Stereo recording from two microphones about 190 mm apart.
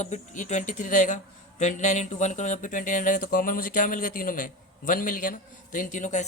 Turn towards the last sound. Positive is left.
turn(degrees=40)  # may be behind; listen again after turning